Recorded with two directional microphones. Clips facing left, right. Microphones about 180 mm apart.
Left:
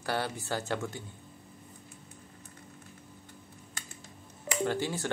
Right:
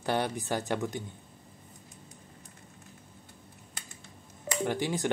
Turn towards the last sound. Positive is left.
turn(degrees=-15)  # may be behind; listen again after turning